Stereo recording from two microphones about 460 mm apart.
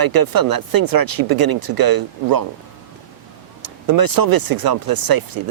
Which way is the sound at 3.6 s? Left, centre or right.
Right.